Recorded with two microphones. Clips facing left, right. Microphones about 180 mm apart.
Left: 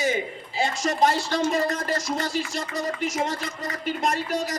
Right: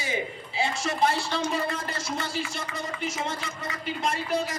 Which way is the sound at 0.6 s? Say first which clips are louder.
Left 3 dB; 45° left (ahead or behind).